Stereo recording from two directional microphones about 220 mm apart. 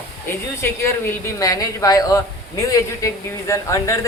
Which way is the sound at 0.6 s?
10° left (ahead or behind).